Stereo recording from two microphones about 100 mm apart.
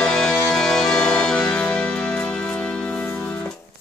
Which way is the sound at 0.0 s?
5° left (ahead or behind).